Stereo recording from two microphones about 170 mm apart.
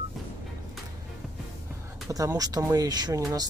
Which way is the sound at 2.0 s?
20° right (ahead or behind).